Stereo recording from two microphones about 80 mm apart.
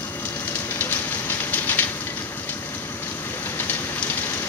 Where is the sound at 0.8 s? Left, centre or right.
Left.